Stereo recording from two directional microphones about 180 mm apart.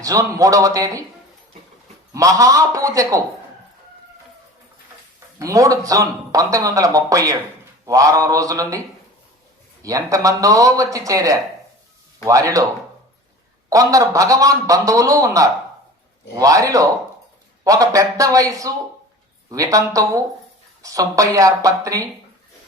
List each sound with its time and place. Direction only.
0.0 s speech: 20° right (ahead or behind)
2.1 s a man's voice: 20° right (ahead or behind)
5.4 s speech: 20° right (ahead or behind)
9.8 s a man's voice: 20° right (ahead or behind)
13.7 s a man's voice: 20° right (ahead or behind)